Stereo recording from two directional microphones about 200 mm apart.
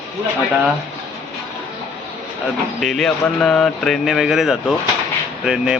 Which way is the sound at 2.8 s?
Centre (ahead or behind).